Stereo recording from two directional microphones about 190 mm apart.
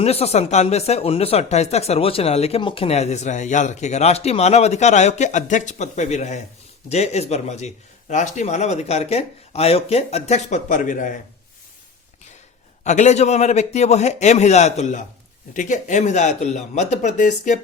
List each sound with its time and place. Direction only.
0.0 s speech: 35° left (ahead or behind)
12.8 s speech: 40° left (ahead or behind)